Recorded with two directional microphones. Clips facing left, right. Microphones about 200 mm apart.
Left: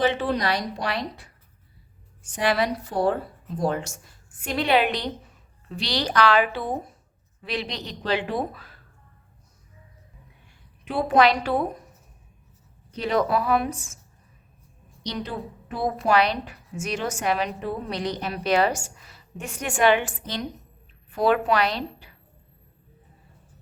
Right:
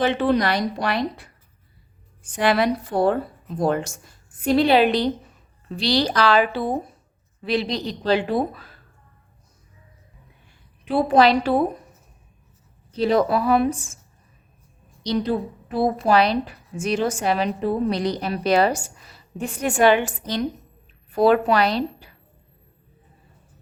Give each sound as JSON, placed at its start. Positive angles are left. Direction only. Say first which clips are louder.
{"t": 0.0, "sound": "a woman's voice", "louder": "right 4 dB", "side_deg": -60}
{"t": 2.4, "sound": "a woman's voice", "louder": "right 4 dB", "side_deg": -55}
{"t": 4.4, "sound": "a woman's voice", "louder": "right 6 dB", "side_deg": -35}
{"t": 10.9, "sound": "a woman's voice", "louder": "right 3 dB", "side_deg": -35}
{"t": 13.0, "sound": "a woman's voice", "louder": "right 4 dB", "side_deg": -35}
{"t": 15.0, "sound": "a woman's voice", "louder": "right 9 dB", "side_deg": -35}